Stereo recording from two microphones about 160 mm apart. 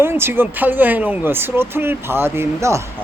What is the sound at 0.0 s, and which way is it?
Speech, 15° right (ahead or behind).